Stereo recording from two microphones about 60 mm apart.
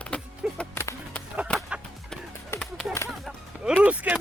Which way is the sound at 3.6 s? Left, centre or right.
Centre.